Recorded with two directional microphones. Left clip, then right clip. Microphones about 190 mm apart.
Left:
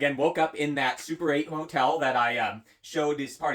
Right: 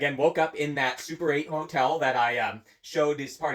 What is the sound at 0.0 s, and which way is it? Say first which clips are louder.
Speech: right 1 dB; 15° left (ahead or behind).